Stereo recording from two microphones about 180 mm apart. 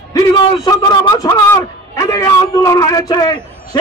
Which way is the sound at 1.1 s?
20° left (ahead or behind).